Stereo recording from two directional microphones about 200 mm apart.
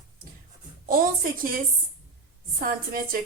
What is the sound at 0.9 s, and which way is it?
A woman's voice, 45° right (ahead or behind).